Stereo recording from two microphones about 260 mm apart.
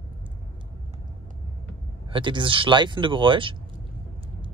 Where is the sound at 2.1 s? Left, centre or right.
Centre.